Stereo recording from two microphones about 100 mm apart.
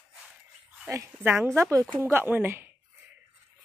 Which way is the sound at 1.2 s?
25° right (ahead or behind).